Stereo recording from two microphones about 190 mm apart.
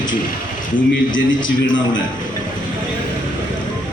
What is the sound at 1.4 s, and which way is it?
Speech, 25° left (ahead or behind).